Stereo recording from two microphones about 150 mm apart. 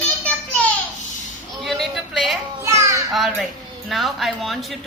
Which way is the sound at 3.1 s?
Centre (ahead or behind).